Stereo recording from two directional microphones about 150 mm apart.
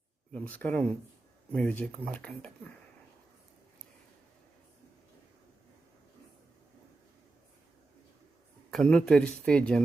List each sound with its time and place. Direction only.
0.3 s speech: 10° left (ahead or behind)
8.7 s speech: 5° left (ahead or behind)